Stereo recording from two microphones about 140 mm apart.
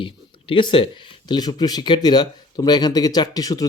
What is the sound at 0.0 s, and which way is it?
Speech, 35° left (ahead or behind).